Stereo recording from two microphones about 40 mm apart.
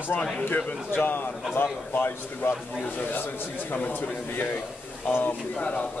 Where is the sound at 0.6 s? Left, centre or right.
Left.